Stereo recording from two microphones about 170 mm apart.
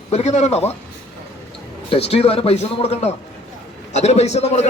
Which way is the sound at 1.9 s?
35° left (ahead or behind).